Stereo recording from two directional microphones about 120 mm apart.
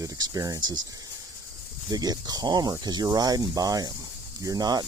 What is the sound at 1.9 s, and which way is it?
Speech, 35° right (ahead or behind).